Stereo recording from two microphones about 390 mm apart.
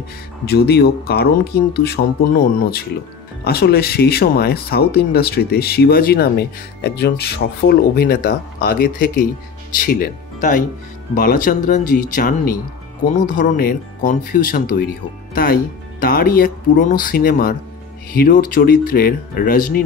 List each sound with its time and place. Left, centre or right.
0.5 s speech: left